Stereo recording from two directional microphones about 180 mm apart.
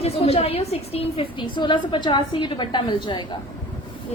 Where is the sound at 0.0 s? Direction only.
35° left (ahead or behind).